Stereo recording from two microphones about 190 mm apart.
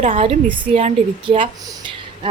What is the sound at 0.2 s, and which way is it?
A woman's voice, 25° right (ahead or behind).